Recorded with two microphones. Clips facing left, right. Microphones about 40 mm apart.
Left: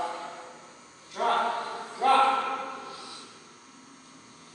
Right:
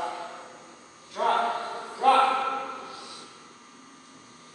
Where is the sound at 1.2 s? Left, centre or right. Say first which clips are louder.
Right 1 dB; centre.